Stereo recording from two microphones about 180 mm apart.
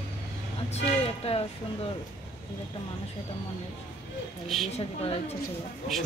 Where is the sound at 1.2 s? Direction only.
35° left (ahead or behind).